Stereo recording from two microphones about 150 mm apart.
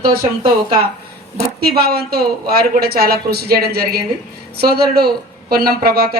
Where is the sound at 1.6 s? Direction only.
90° right.